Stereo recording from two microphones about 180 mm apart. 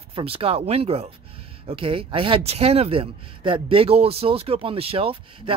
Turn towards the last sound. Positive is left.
turn(degrees=-30)  # may be behind; listen again after turning